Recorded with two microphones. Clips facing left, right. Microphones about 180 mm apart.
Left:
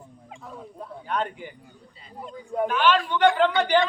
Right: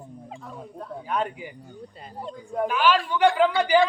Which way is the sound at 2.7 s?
5° right (ahead or behind).